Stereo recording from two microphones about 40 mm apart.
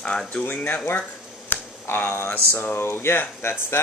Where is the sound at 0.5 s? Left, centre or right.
Left.